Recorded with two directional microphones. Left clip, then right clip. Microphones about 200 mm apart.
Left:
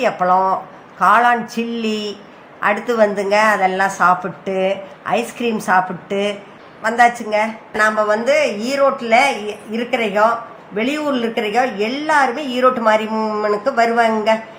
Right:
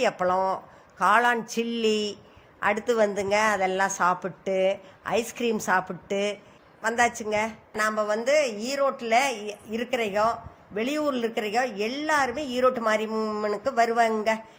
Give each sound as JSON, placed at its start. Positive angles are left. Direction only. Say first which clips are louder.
{"t": 0.0, "sound": "a woman's voice", "louder": "left 9 dB", "side_deg": -45}